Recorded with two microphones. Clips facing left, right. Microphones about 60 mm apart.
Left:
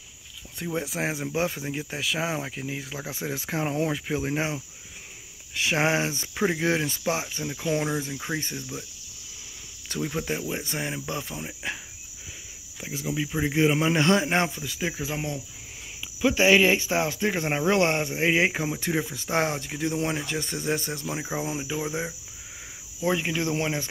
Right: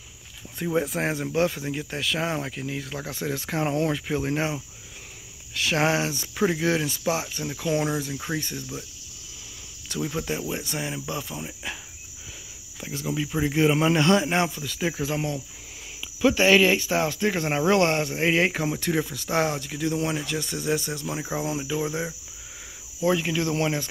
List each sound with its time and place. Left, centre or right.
0.7 s speech: centre
1.3 s speech: centre
5.5 s speech: left
8.4 s speech: left
9.9 s speech: left
10.6 s cricket: left
13.1 s speech: centre
13.9 s speech: left
14.8 s speech: centre
15.0 s speech: centre; by 21.1 s left
21.1 s speech: centre